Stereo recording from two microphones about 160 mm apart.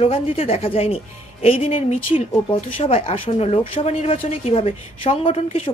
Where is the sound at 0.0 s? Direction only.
35° left (ahead or behind).